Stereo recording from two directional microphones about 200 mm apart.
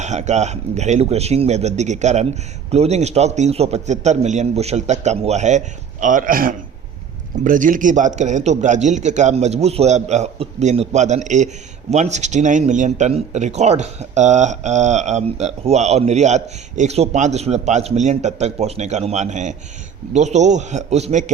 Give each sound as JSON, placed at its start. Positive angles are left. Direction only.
{"t": 0.0, "sound": "speech", "side_deg": -35}